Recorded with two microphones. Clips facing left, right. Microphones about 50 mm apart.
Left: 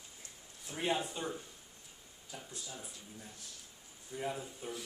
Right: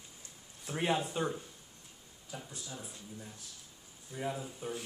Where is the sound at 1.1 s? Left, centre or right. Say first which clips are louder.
Right 5 dB; centre.